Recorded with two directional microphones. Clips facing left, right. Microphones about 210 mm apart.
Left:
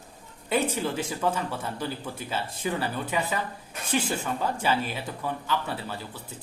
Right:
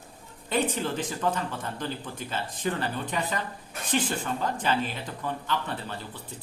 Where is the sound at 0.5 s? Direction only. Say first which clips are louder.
Left 1 dB; 10° left (ahead or behind).